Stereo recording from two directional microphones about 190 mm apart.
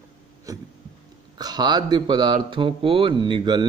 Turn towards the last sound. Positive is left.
turn(degrees=-25)  # may be behind; listen again after turning